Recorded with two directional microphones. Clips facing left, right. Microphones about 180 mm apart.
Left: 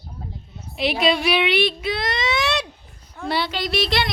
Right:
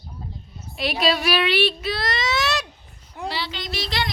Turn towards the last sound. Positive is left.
turn(degrees=65)  # may be behind; listen again after turning